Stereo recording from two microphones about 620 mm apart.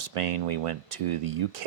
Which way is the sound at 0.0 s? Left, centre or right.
Right.